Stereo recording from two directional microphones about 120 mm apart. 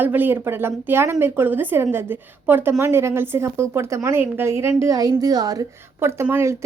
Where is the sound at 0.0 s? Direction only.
15° right (ahead or behind).